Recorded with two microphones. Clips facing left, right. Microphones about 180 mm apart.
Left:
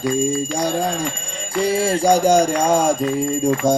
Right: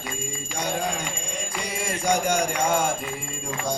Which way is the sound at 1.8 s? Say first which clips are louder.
Left 7 dB; 30° left (ahead or behind).